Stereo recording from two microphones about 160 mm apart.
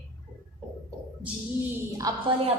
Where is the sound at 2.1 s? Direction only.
25° right (ahead or behind).